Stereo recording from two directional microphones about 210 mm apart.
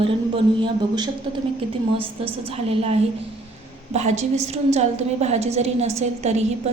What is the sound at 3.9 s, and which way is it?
A woman's voice, 35° right (ahead or behind).